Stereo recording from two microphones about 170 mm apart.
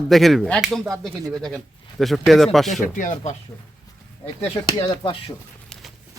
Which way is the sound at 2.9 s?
50° left (ahead or behind).